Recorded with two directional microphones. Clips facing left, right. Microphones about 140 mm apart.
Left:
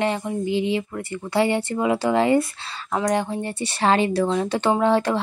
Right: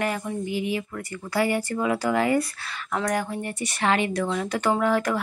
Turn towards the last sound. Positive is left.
turn(degrees=25)  # may be behind; listen again after turning